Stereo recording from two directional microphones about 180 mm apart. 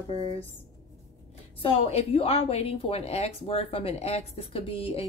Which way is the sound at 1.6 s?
35° left (ahead or behind).